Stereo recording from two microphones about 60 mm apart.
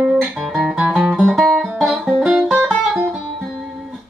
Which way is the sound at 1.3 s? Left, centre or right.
Centre.